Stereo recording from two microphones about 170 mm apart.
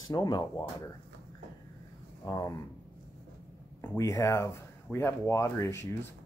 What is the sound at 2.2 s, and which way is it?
Speech, 20° left (ahead or behind).